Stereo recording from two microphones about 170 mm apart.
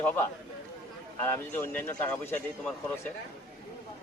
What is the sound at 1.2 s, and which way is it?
A man's voice, 15° left (ahead or behind).